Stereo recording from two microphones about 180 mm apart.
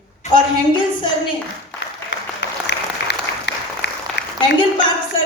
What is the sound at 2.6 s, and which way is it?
Applause, 70° left (ahead or behind).